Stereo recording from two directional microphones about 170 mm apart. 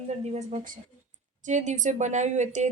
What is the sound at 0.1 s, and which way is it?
Speech, 40° right (ahead or behind).